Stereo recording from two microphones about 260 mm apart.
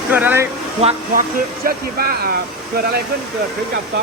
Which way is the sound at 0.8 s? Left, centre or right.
Right.